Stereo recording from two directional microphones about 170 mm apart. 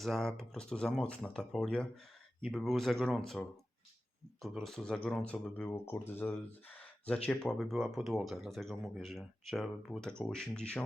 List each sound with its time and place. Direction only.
0.0 s speech: centre (ahead or behind)
4.4 s speech: centre (ahead or behind)